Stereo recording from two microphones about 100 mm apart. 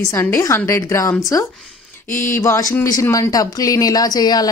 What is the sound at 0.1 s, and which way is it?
Speech, 30° left (ahead or behind).